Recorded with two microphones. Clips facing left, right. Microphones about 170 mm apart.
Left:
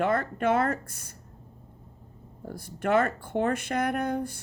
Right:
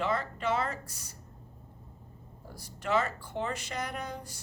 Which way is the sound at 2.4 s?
55° left (ahead or behind).